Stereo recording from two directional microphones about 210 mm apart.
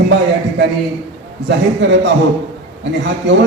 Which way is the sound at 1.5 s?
55° right (ahead or behind).